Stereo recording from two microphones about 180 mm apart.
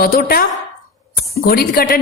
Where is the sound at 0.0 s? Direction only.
55° left (ahead or behind).